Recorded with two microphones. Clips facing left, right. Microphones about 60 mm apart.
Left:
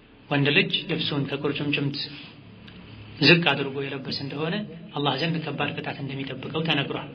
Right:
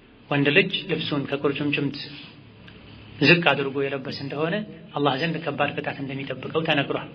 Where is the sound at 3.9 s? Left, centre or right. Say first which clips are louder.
Right 2 dB; right.